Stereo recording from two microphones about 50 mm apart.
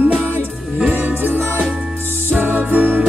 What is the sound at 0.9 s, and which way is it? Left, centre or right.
Music, right.